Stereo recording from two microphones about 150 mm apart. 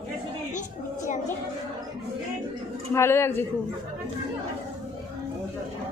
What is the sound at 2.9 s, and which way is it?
Speech, 15° left (ahead or behind).